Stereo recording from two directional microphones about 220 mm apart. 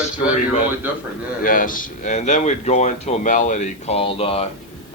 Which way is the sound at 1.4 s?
40° left (ahead or behind).